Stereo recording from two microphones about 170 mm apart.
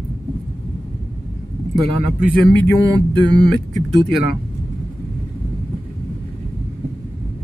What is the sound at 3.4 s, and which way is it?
Speech, centre (ahead or behind).